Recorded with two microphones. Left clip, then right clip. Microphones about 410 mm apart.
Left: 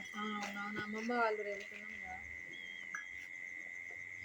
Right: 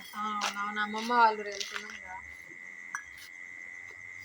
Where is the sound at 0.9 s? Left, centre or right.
Left.